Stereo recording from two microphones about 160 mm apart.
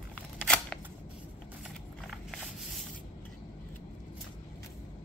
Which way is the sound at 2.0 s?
Centre (ahead or behind).